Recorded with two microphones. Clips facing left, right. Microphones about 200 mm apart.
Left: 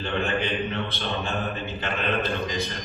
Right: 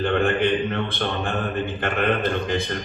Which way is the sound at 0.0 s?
50° right (ahead or behind).